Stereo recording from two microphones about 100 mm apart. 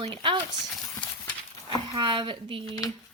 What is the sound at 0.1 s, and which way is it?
Speech, 50° right (ahead or behind).